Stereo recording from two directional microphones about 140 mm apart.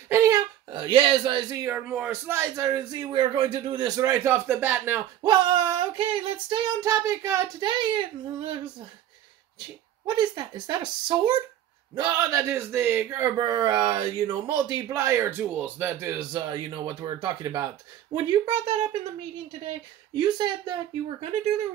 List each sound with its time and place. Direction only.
0.1 s a sound: 20° right (ahead or behind)
0.7 s speech: 35° right (ahead or behind)
1.6 s speech: 10° right (ahead or behind)
5.2 s child singing: 35° right (ahead or behind)
10.0 s child singing: 30° right (ahead or behind)
11.9 s speech: 30° right (ahead or behind)
13.4 s speech: 30° right (ahead or behind)
16.3 s child singing: 35° right (ahead or behind)
20.2 s speech: 30° right (ahead or behind)
21.2 s speech: 45° right (ahead or behind)